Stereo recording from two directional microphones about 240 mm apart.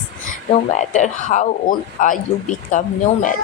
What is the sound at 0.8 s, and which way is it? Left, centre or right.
Speech, left.